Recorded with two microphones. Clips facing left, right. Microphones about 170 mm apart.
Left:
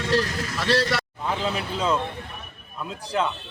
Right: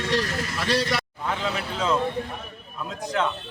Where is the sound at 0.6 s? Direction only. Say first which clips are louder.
Left 2 dB; centre (ahead or behind).